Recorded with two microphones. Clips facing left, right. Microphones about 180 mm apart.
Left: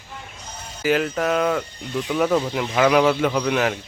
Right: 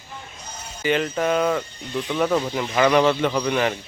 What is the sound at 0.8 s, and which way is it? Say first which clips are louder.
Speech: left 1 dB; 5° left (ahead or behind).